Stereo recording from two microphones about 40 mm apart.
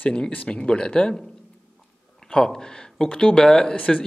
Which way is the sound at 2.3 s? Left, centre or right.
Centre.